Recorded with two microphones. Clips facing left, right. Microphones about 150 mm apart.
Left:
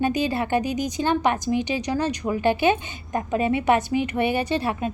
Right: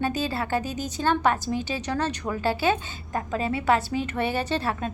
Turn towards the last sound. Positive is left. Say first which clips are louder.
# left 3 dB
turn(degrees=10)  # may be behind; listen again after turning